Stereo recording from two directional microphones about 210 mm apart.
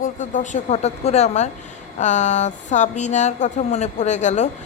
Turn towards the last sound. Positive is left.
turn(degrees=35)  # may be behind; listen again after turning